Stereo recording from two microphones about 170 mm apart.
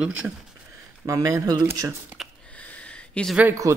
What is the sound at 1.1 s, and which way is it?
Speech, 20° right (ahead or behind).